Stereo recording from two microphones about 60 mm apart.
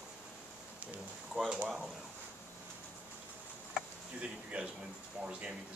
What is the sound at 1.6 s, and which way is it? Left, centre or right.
Speech, centre.